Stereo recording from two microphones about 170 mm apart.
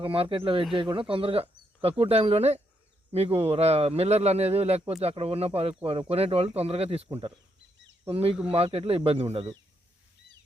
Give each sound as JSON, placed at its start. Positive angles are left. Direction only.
{"t": 0.0, "sound": "speech", "side_deg": -30}